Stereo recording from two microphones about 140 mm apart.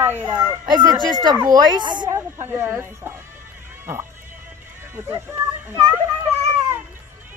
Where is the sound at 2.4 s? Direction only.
15° right (ahead or behind).